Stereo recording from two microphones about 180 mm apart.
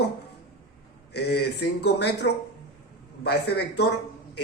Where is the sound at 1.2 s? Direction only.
65° left (ahead or behind).